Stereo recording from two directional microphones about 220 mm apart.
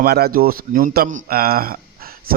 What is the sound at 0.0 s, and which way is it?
Speech, 45° right (ahead or behind).